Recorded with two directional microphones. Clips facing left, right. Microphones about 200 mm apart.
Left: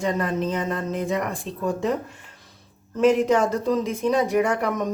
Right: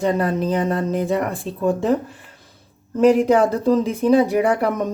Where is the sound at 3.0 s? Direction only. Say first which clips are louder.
Right 4 dB; 35° right (ahead or behind).